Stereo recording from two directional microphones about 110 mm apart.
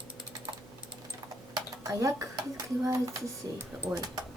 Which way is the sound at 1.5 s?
30° right (ahead or behind).